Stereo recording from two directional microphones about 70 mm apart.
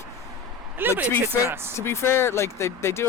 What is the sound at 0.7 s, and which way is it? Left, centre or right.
Speech, right.